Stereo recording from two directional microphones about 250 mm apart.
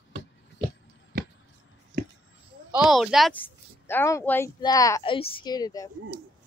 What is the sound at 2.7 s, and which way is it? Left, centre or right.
Speech, centre.